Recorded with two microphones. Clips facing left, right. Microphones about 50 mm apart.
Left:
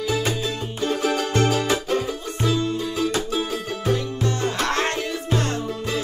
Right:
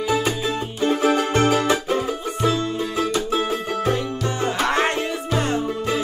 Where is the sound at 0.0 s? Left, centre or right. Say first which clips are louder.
Right 2 dB; right.